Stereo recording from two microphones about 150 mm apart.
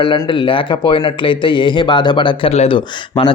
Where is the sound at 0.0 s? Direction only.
30° left (ahead or behind).